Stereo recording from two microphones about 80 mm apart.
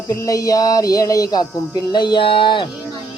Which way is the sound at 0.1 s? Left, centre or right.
Left.